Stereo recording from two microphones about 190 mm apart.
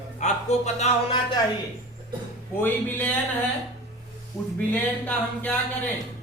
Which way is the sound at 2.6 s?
10° left (ahead or behind).